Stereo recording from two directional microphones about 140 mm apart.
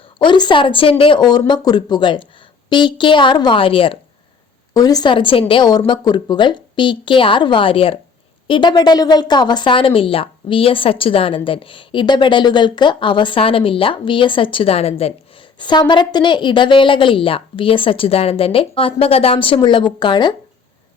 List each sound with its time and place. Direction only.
0.2 s a woman's voice: 35° left (ahead or behind)
4.7 s a woman's voice: 25° left (ahead or behind); by 15.1 s 45° left (ahead or behind)
15.5 s a woman's voice: 35° left (ahead or behind)